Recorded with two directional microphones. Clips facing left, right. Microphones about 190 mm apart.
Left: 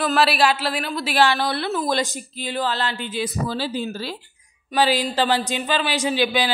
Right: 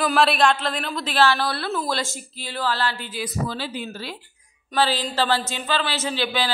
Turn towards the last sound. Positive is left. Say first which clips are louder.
# left 4 dB
turn(degrees=15)  # may be behind; listen again after turning